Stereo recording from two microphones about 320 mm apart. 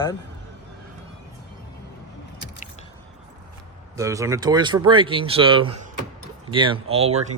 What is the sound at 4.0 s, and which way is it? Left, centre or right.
Speech, centre.